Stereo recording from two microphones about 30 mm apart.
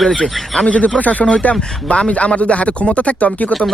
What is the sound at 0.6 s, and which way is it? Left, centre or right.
Speech, left.